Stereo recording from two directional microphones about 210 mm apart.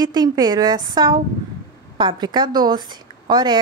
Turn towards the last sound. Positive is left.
turn(degrees=-20)  # may be behind; listen again after turning